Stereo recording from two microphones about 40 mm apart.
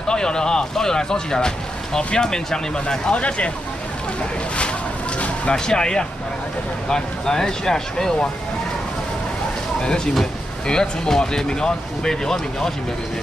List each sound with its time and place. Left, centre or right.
0.1 s speech: centre
3.2 s speech: left
5.5 s speech: centre
10.7 s speech: centre